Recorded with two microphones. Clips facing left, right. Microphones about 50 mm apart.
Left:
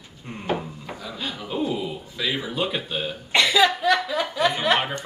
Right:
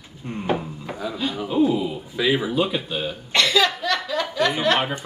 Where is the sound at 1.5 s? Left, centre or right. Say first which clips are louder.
Right 6 dB; centre.